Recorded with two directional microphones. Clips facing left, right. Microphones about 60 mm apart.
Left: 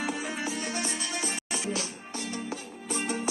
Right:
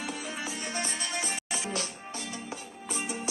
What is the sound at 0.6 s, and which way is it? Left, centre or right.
Music, right.